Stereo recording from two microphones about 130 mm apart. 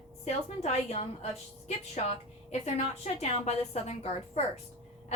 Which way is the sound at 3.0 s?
55° left (ahead or behind).